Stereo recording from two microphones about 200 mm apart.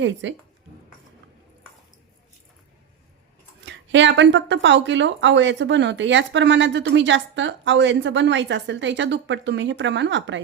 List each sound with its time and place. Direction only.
0.0 s speech: 65° right (ahead or behind)
3.7 s speech: 65° right (ahead or behind)